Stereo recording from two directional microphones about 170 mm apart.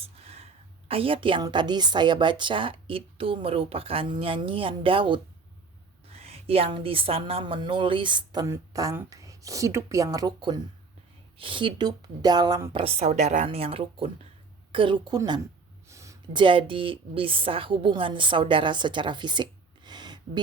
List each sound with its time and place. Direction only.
0.0 s a sound: 35° right (ahead or behind)
0.9 s a woman's voice: 30° right (ahead or behind)
12.8 s a woman's voice: 40° right (ahead or behind)